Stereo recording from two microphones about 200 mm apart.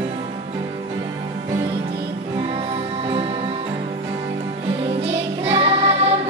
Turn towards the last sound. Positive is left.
turn(degrees=-30)  # may be behind; listen again after turning